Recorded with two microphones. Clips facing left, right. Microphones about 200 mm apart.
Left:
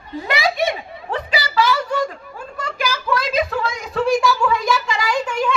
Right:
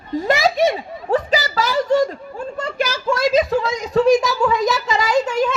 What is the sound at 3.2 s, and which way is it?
Speech, 40° right (ahead or behind).